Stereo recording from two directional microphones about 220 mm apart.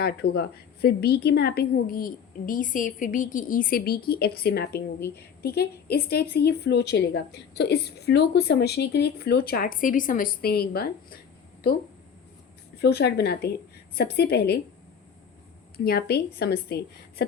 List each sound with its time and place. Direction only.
0.0 s a woman's voice: 45° left (ahead or behind)
12.7 s a woman's voice: 45° left (ahead or behind)
15.8 s a woman's voice: 45° left (ahead or behind)